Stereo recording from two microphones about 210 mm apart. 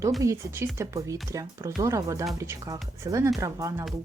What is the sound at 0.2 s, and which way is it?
Speech, 15° right (ahead or behind).